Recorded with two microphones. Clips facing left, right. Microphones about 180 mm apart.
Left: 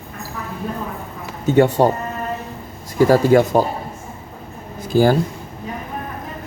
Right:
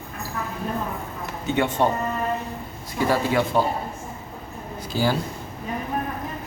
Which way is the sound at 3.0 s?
45° left (ahead or behind).